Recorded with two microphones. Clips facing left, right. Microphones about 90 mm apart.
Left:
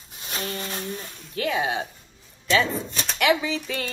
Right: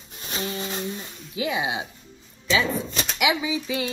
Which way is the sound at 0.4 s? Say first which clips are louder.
Right 2 dB; 15° right (ahead or behind).